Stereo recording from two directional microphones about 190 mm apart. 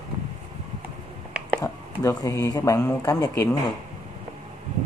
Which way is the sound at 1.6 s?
20° left (ahead or behind).